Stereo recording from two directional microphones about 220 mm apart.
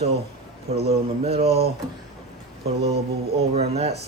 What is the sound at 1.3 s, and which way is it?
Mantra, 30° right (ahead or behind).